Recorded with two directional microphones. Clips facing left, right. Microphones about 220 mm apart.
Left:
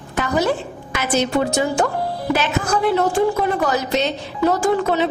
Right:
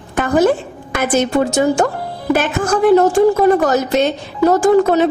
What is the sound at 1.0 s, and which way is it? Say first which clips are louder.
A woman's voice: right 4 dB; 50° right (ahead or behind).